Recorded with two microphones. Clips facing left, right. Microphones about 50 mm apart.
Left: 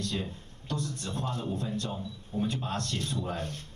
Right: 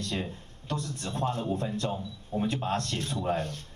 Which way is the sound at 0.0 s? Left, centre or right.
Right.